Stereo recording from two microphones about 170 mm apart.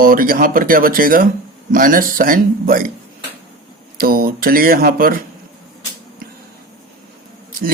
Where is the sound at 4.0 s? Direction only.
60° right (ahead or behind).